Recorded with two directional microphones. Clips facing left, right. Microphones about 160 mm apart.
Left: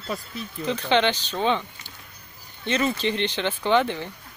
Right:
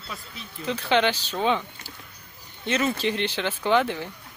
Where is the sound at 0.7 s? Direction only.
5° right (ahead or behind).